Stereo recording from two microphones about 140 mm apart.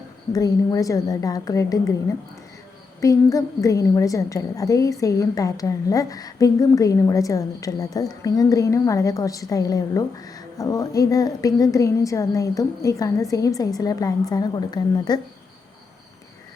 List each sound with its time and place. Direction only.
0.3 s a woman's voice: 25° left (ahead or behind)
3.0 s a woman's voice: 25° left (ahead or behind)